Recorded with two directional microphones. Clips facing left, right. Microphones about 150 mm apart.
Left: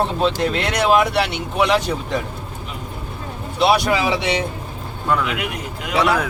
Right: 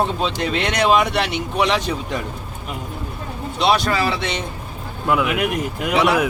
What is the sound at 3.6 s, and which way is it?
Speech, 10° left (ahead or behind).